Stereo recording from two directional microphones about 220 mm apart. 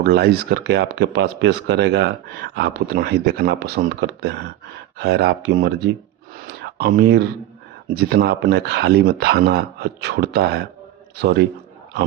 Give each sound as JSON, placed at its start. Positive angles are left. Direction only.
{"t": 0.0, "sound": "speech", "side_deg": -45}